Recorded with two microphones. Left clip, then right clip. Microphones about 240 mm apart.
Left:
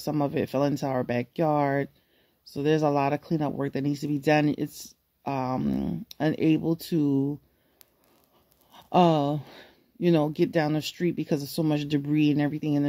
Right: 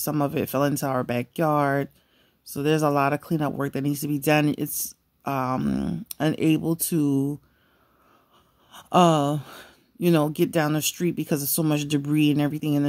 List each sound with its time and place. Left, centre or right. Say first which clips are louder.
0.0 s speech: right 2 dB; right
9.9 s speech: right 2 dB; centre